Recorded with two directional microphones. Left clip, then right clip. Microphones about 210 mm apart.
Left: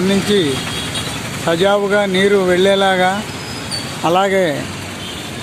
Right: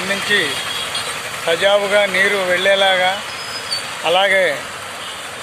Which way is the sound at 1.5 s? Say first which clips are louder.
Left 1 dB; 15° left (ahead or behind).